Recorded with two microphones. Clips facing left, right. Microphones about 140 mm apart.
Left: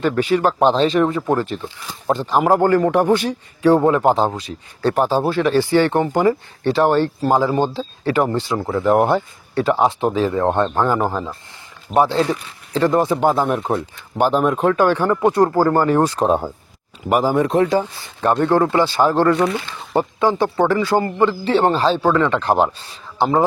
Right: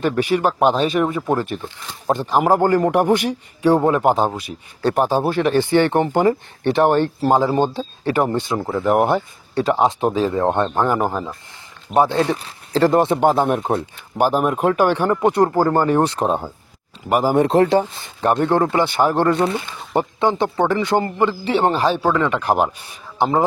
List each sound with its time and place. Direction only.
0.2 s speech: 15° right (ahead or behind)
12.3 s speech: 35° right (ahead or behind)
14.1 s speech: 10° right (ahead or behind)
16.3 s speech: 10° left (ahead or behind)
17.3 s speech: 25° right (ahead or behind)